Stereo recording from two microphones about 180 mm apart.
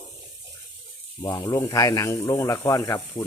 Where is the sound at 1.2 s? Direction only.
20° left (ahead or behind).